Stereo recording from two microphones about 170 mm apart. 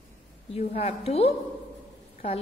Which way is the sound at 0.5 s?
35° left (ahead or behind).